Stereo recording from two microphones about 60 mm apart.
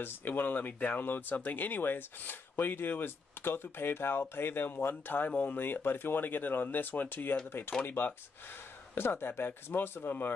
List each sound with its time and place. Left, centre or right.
0.0 s speech: left